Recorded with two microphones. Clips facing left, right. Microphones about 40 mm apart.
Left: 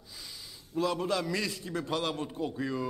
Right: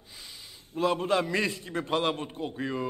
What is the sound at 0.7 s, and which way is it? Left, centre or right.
A man's voice, right.